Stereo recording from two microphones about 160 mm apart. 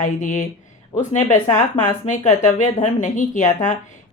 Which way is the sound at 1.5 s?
50° left (ahead or behind).